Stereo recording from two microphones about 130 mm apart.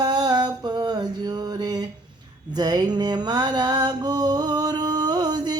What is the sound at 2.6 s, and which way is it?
Music, 35° right (ahead or behind).